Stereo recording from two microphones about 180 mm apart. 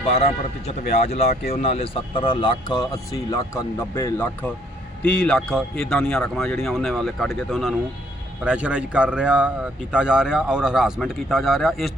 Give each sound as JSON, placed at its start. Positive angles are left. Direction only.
{"t": 0.1, "sound": "a man's voice", "side_deg": 35}